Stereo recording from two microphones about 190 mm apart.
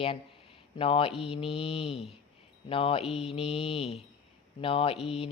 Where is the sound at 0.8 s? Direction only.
30° left (ahead or behind).